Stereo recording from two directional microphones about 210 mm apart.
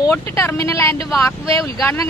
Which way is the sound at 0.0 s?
10° left (ahead or behind).